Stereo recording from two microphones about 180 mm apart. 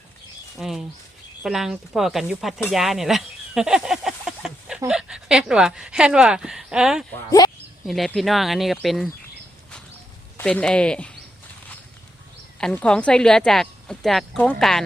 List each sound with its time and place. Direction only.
0.5 s speech: centre (ahead or behind)
7.1 s speech: 20° left (ahead or behind)
7.9 s speech: centre (ahead or behind)
10.3 s speech: 5° left (ahead or behind)
12.5 s speech: 5° left (ahead or behind)